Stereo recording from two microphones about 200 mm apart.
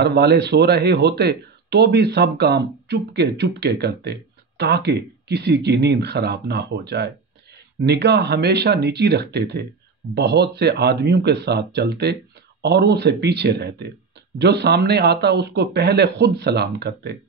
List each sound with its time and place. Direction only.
0.0 s speech: 55° right (ahead or behind)